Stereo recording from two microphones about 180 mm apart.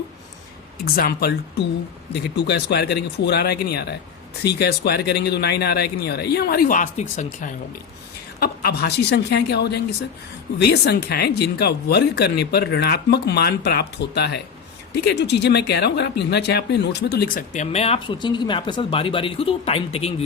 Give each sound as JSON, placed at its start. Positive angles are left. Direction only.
{"t": 0.9, "sound": "speech", "side_deg": 60}
{"t": 8.4, "sound": "a woman's voice", "side_deg": 60}